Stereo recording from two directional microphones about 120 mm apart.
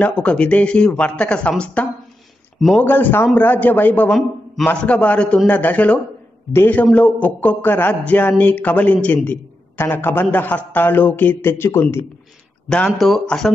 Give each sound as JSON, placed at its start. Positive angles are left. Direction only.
{"t": 0.0, "sound": "a man's voice", "side_deg": 10}
{"t": 12.6, "sound": "speech", "side_deg": 5}